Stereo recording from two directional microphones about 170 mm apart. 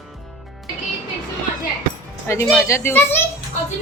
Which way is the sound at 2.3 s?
15° left (ahead or behind).